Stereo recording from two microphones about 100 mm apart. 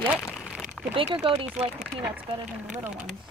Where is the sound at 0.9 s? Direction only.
60° right (ahead or behind).